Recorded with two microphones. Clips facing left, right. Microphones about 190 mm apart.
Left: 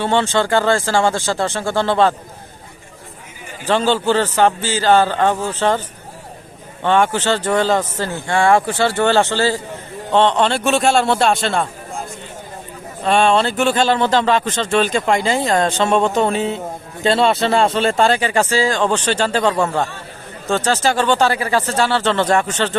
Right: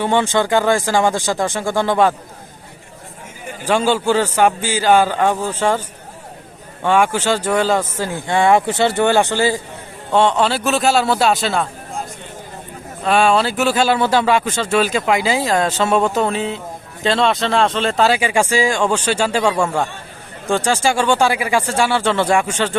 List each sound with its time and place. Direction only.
0.0 s speech: 15° right (ahead or behind)
3.7 s speech: 10° right (ahead or behind)
6.8 s a man's voice: 10° right (ahead or behind)
13.1 s a man's voice: 5° right (ahead or behind)